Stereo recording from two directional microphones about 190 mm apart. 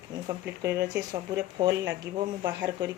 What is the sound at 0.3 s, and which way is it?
Speech, 15° right (ahead or behind).